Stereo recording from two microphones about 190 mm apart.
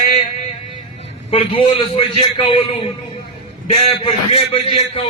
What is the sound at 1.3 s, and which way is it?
A man's voice, 30° left (ahead or behind).